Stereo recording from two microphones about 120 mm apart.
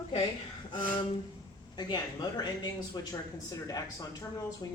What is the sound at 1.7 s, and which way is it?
A man's voice, 35° left (ahead or behind).